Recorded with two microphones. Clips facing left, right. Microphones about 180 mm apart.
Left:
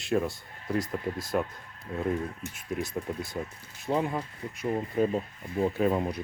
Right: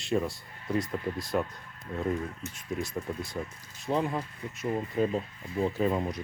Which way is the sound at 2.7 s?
Centre (ahead or behind).